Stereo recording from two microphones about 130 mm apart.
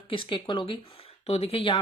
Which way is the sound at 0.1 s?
40° left (ahead or behind).